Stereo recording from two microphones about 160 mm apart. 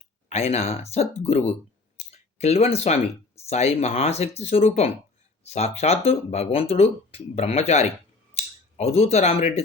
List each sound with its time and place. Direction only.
0.3 s speech: 45° left (ahead or behind)